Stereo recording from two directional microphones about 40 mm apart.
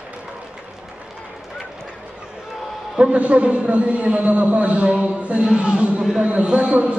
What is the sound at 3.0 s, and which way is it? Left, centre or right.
A man's voice, right.